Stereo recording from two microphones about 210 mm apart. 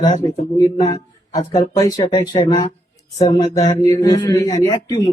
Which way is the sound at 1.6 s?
15° left (ahead or behind).